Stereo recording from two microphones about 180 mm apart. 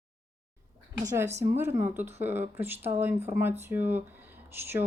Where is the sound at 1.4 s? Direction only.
15° right (ahead or behind).